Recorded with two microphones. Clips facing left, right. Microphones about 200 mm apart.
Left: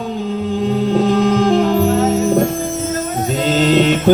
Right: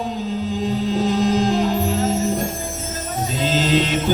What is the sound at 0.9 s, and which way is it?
Music, 60° left (ahead or behind).